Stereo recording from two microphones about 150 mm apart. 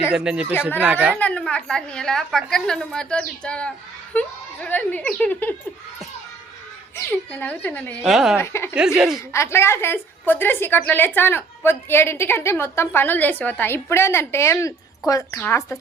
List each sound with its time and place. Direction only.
0.1 s speech: 5° right (ahead or behind)
1.2 s a woman's voice: 10° left (ahead or behind)
6.9 s a woman's voice: 15° left (ahead or behind)
8.0 s a woman's voice: centre (ahead or behind)
8.4 s a woman's voice: 15° left (ahead or behind)
8.7 s a woman's voice: 5° right (ahead or behind)
9.3 s a woman's voice: 20° left (ahead or behind)